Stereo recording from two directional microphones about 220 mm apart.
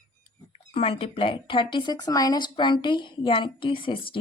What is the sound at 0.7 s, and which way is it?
A woman's voice, 25° left (ahead or behind).